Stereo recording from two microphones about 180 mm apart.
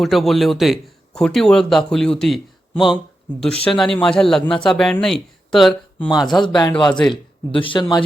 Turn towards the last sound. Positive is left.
turn(degrees=25)  # may be behind; listen again after turning